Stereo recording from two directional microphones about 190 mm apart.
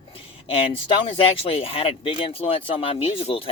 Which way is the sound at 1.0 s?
30° left (ahead or behind).